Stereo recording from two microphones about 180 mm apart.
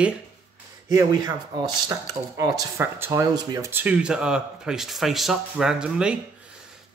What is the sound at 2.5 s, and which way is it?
Speech, 15° right (ahead or behind).